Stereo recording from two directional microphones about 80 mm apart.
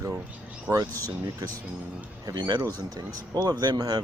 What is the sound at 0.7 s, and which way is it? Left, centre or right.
Speech, right.